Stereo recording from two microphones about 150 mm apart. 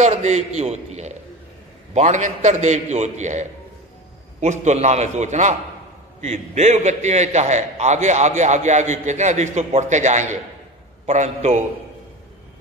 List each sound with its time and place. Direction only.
0.0 s a man's voice: 50° right (ahead or behind)